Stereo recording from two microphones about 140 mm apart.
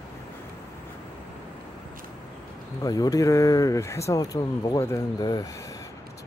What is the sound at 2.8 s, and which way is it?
Speech, 25° left (ahead or behind).